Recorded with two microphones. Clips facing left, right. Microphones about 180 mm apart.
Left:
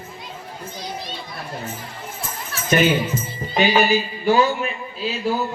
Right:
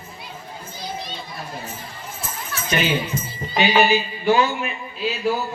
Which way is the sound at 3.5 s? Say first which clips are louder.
Even; 45° left (ahead or behind).